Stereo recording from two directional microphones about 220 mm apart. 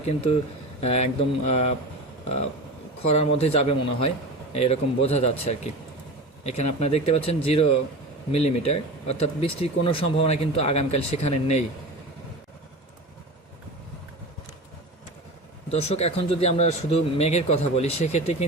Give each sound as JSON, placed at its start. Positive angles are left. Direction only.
{"t": 0.1, "sound": "speech", "side_deg": 25}
{"t": 3.1, "sound": "speech", "side_deg": 30}
{"t": 15.7, "sound": "speech", "side_deg": 30}